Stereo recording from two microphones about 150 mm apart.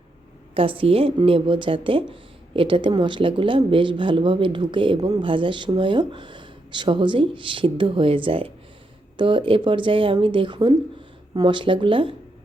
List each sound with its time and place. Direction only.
0.5 s a woman's voice: 35° right (ahead or behind)